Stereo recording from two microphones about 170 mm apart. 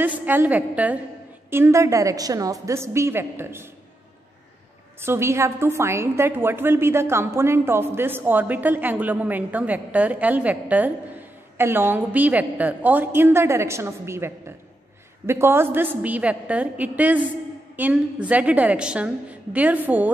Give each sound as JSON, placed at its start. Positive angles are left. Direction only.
{"t": 0.0, "sound": "a woman's voice", "side_deg": -10}
{"t": 5.0, "sound": "a woman's voice", "side_deg": -15}